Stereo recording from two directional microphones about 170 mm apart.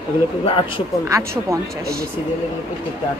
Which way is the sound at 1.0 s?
20° right (ahead or behind).